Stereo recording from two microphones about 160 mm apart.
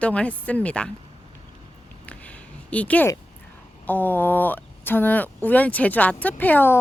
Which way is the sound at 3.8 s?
10° left (ahead or behind).